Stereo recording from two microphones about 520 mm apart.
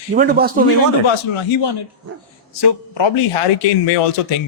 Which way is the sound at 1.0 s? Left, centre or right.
Left.